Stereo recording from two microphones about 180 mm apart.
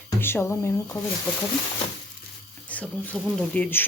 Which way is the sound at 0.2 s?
10° left (ahead or behind).